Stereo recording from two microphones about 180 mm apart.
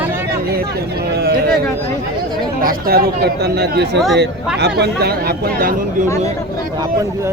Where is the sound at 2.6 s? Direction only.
55° right (ahead or behind).